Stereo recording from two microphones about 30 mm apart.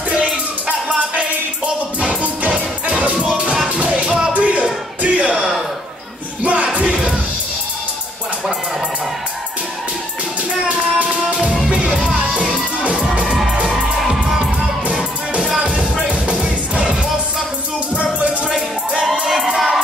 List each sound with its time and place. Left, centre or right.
0.1 s music: right
4.3 s music: right
5.0 s a sound: right
10.7 s music: right
15.6 s music: right
19.2 s music: centre